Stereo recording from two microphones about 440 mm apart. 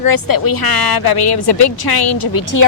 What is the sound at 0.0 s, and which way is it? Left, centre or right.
A woman's voice, left.